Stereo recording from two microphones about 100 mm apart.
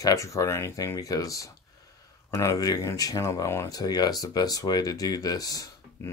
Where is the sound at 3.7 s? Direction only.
40° left (ahead or behind).